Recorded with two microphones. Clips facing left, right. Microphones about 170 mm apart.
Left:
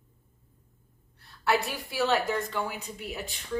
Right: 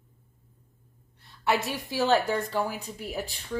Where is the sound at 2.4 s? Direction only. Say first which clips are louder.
Right 3 dB; 30° right (ahead or behind).